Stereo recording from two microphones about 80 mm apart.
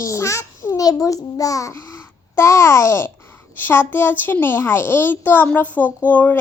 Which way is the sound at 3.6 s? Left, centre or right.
Left.